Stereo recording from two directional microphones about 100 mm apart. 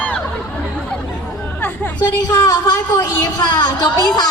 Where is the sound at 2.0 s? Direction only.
40° left (ahead or behind).